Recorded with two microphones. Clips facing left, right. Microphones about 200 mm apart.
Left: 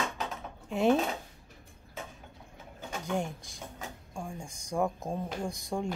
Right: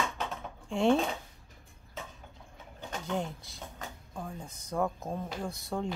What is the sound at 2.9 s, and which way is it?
Speech, 15° left (ahead or behind).